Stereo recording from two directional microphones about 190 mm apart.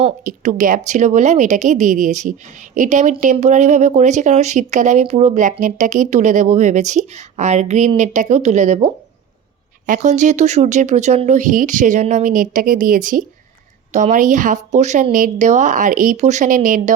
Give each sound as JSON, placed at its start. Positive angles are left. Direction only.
{"t": 0.3, "sound": "speech", "side_deg": -45}